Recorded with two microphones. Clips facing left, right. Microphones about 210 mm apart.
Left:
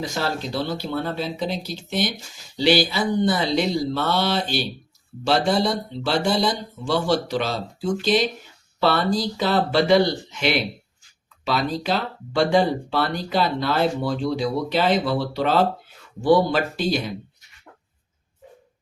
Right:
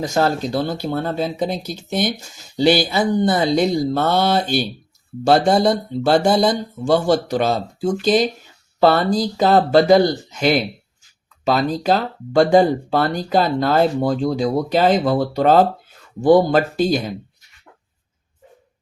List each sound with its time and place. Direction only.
0.0 s speech: 45° right (ahead or behind)